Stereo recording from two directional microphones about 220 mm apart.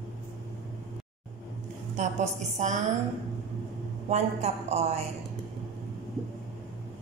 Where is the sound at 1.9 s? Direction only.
30° right (ahead or behind).